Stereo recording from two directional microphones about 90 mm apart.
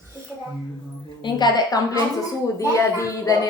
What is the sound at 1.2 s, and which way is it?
A woman's voice, 50° left (ahead or behind).